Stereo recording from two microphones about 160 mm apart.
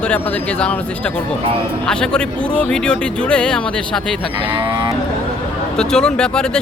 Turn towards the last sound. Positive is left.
turn(degrees=5)  # may be behind; listen again after turning